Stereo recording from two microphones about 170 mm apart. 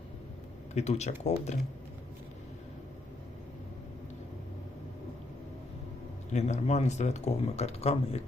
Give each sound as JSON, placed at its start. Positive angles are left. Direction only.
{"t": 0.7, "sound": "speech", "side_deg": 40}
{"t": 6.3, "sound": "speech", "side_deg": 40}